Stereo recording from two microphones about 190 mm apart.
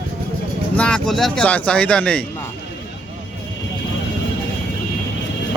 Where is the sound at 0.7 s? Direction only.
5° left (ahead or behind).